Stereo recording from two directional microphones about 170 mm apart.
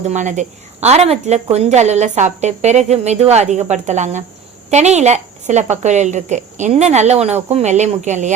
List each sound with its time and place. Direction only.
0.0 s a woman's voice: 45° right (ahead or behind)